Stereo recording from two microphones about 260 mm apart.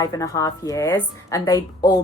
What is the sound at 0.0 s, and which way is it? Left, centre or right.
Speech, centre.